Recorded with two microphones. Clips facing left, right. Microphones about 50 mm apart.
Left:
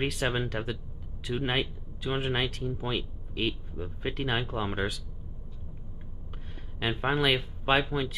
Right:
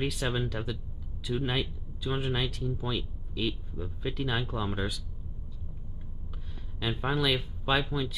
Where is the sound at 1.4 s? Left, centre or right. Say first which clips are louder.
Left 2 dB; left.